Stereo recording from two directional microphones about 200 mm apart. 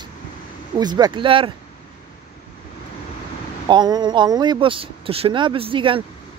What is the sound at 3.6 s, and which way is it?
Speech, 20° right (ahead or behind).